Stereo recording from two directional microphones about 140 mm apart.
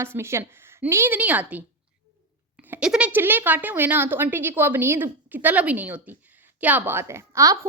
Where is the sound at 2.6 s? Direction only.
10° right (ahead or behind).